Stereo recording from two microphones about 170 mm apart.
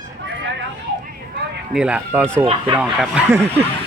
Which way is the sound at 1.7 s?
5° right (ahead or behind).